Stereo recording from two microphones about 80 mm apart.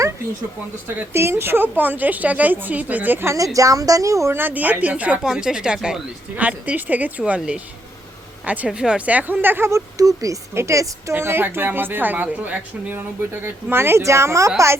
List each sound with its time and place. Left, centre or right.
1.1 s a woman's voice: right
3.2 s a woman's voice: right
4.4 s a woman's voice: right
10.5 s a woman's voice: right